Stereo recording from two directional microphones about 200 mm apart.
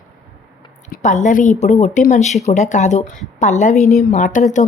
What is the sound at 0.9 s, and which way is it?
A woman's voice, 40° left (ahead or behind).